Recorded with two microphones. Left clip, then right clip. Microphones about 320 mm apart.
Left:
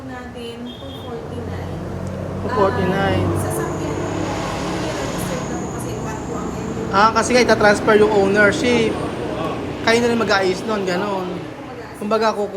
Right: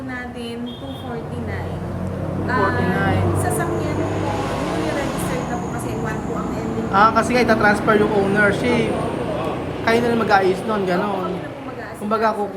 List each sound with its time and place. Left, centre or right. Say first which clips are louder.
2.9 s speech: left 1 dB; centre
6.9 s speech: left 1 dB; centre